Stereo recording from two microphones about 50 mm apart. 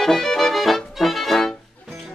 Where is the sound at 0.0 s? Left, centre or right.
Centre.